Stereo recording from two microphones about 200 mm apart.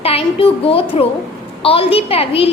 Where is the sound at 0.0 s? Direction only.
30° left (ahead or behind).